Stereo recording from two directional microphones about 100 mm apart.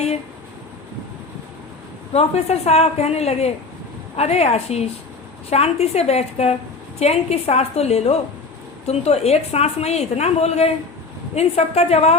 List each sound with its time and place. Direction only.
2.1 s a woman's voice: 90° left